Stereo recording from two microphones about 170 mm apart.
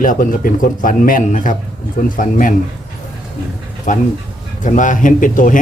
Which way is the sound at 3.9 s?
45° left (ahead or behind).